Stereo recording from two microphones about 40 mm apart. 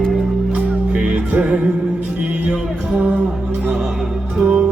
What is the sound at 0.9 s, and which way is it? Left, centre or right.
Music, right.